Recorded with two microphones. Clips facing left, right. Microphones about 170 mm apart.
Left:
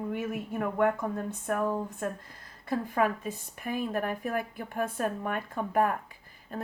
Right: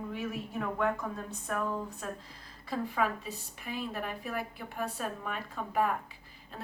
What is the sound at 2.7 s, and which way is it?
Speech, 50° left (ahead or behind).